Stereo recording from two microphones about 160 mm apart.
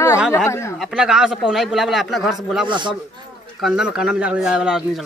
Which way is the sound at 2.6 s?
30° right (ahead or behind).